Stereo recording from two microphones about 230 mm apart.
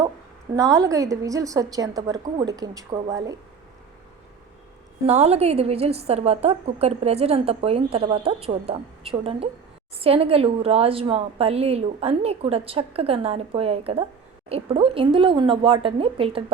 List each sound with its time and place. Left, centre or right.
0.5 s a woman's voice: centre
5.0 s a woman's voice: right